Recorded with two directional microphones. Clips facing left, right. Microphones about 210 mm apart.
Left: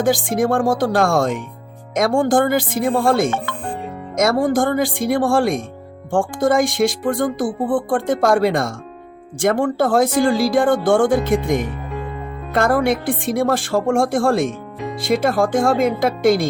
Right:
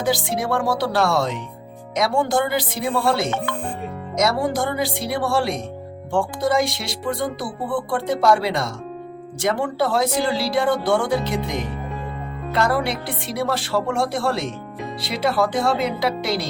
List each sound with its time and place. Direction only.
0.0 s speech: 50° left (ahead or behind)